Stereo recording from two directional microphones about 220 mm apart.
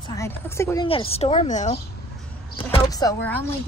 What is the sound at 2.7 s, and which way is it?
Speech, 15° left (ahead or behind).